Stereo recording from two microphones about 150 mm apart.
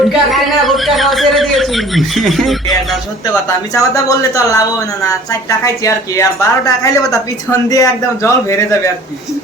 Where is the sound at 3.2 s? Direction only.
20° left (ahead or behind).